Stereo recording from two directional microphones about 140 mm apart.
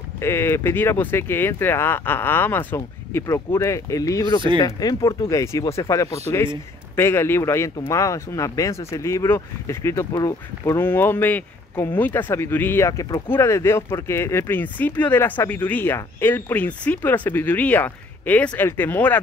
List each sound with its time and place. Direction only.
0.2 s speech: 15° left (ahead or behind)